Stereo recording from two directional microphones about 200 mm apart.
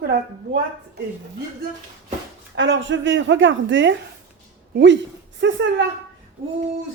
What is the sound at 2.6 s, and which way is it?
Speech, 65° right (ahead or behind).